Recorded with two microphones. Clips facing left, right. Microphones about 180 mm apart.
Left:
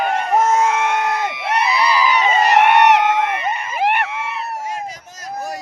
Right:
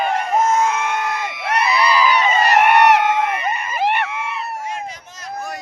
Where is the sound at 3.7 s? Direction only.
10° left (ahead or behind).